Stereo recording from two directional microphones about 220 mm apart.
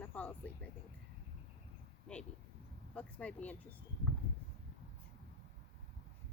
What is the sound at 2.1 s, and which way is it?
Speech, 5° left (ahead or behind).